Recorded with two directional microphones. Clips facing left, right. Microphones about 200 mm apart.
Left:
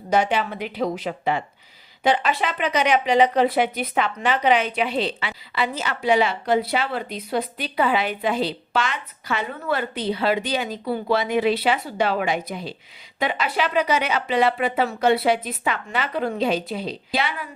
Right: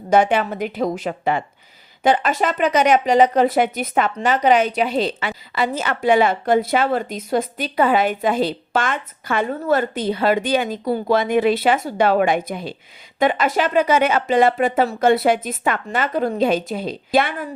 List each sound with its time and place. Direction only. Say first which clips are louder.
0.1 s speech: right 5 dB; 50° right (ahead or behind)